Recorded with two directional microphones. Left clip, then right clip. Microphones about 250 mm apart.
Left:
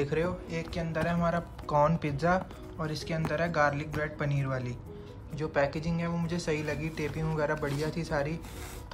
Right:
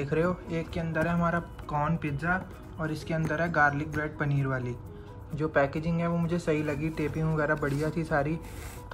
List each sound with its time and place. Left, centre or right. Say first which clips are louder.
0.0 s speech: right 2 dB; centre